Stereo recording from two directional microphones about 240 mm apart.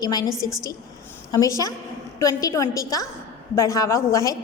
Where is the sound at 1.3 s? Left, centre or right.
Centre.